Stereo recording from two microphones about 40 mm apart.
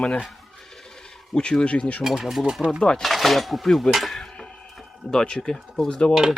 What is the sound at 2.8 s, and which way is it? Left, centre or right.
Speech, left.